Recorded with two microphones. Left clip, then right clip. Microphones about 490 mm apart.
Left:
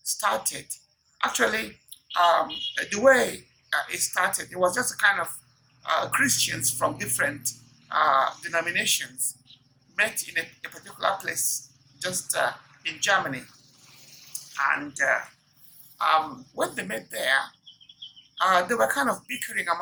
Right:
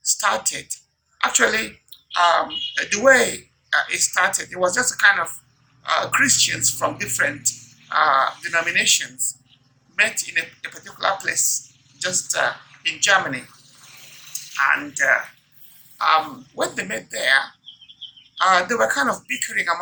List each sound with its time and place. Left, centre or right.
0.0 s a woman's voice: left
14.5 s speech: left